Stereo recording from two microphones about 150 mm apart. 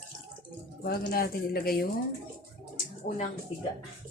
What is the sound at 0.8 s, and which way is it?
Speech, 80° left.